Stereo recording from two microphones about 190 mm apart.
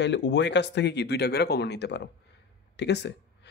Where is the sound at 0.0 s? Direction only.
65° left (ahead or behind).